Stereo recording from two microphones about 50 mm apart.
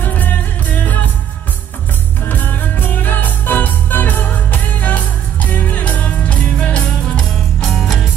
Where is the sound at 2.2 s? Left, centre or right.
Left.